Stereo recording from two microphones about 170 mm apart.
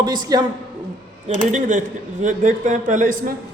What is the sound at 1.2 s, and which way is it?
A man's voice, 45° right (ahead or behind).